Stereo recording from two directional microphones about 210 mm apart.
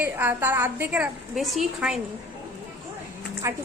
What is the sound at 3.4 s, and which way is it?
Speech, 15° right (ahead or behind).